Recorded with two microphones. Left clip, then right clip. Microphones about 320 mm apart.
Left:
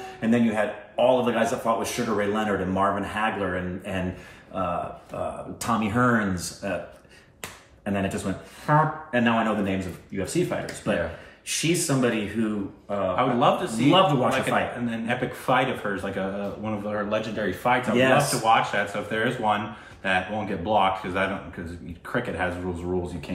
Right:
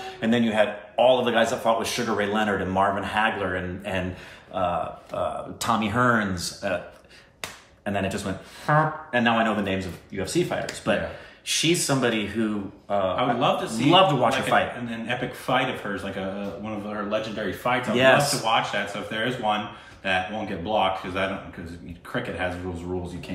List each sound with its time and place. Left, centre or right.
0.0 s speech: centre
5.1 s speech: centre
7.8 s speech: centre